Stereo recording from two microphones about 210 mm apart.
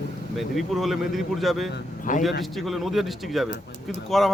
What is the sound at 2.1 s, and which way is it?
Speech, 40° left (ahead or behind).